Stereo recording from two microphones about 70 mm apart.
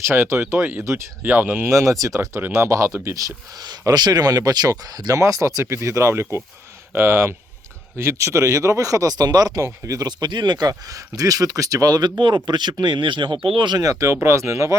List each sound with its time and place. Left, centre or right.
0.1 s speech: right
1.2 s speech: right
1.7 s speech: right
3.6 s speech: right
9.6 s speech: right
10.1 s speech: right
10.7 s speech: right
13.8 s speech: right